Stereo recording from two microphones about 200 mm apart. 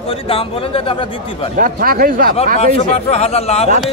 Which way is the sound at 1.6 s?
45° right (ahead or behind).